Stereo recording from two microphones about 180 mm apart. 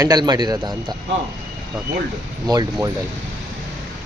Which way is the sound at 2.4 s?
20° right (ahead or behind).